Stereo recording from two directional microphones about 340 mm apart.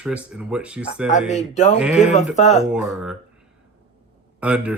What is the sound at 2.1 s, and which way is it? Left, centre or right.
Speech, centre.